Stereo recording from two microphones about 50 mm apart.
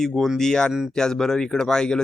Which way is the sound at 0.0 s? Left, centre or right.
Centre.